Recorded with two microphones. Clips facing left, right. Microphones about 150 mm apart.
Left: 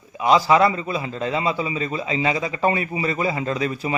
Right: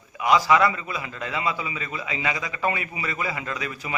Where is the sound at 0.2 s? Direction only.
30° left (ahead or behind).